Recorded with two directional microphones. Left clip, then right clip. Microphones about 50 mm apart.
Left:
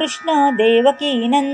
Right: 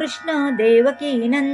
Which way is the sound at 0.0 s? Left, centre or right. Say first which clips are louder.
Left 6 dB; left.